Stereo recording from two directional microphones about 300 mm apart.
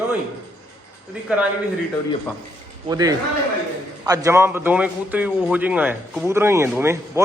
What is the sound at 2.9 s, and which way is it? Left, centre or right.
A man's voice, centre.